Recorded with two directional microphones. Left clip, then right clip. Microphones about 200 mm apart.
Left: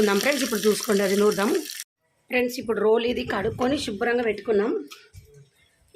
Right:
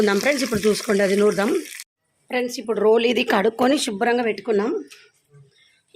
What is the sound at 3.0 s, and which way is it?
Speech, 45° right (ahead or behind).